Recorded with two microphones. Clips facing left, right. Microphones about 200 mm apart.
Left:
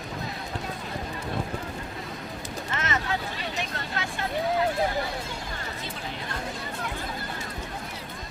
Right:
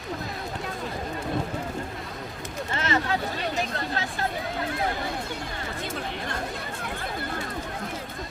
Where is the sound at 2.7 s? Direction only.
30° right (ahead or behind).